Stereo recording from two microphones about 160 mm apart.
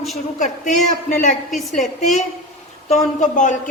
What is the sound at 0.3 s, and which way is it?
Speech, 50° left (ahead or behind).